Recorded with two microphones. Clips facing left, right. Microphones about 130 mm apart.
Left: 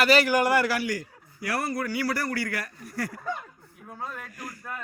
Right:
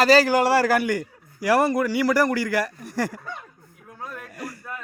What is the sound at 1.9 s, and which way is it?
A man's voice, 90° right.